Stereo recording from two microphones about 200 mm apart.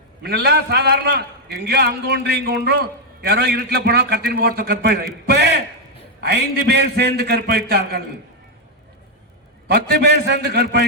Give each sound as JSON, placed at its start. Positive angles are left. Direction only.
{"t": 0.2, "sound": "a man's voice", "side_deg": -55}
{"t": 5.2, "sound": "a sound", "side_deg": -55}
{"t": 6.1, "sound": "a man's voice", "side_deg": -55}
{"t": 9.6, "sound": "a man's voice", "side_deg": -50}